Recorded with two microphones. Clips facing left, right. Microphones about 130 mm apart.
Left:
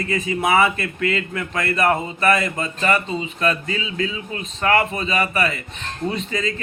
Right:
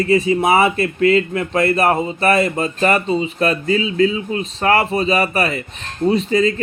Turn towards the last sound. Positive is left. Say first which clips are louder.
# right 9 dB
turn(degrees=-35)  # may be behind; listen again after turning